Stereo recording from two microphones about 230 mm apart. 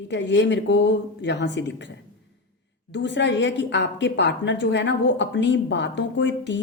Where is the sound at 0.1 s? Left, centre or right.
Left.